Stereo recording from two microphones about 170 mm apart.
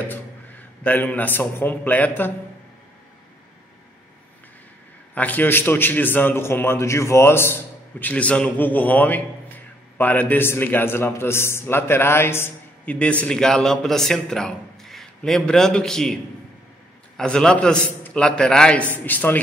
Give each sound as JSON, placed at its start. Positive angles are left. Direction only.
{"t": 0.8, "sound": "a man's voice", "side_deg": 10}
{"t": 5.1, "sound": "a man's voice", "side_deg": 10}
{"t": 17.2, "sound": "a man's voice", "side_deg": 5}